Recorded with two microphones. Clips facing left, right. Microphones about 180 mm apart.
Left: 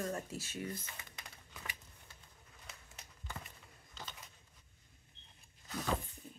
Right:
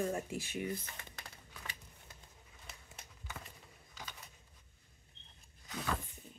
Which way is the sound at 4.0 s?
10° right (ahead or behind).